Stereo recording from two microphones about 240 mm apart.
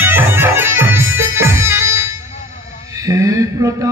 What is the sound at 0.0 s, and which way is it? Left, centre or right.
Music, centre.